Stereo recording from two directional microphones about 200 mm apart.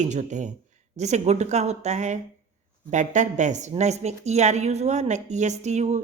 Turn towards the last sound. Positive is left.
turn(degrees=-35)  # may be behind; listen again after turning